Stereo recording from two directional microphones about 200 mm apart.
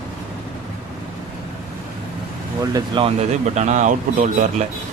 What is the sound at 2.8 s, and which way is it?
Speech, 25° right (ahead or behind).